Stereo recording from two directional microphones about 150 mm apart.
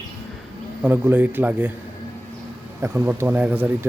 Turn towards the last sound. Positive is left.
turn(degrees=-10)  # may be behind; listen again after turning